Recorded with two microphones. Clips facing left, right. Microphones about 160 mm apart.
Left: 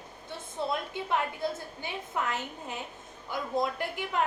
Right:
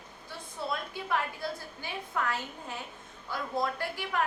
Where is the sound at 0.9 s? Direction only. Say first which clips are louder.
Left 2 dB; 20° left (ahead or behind).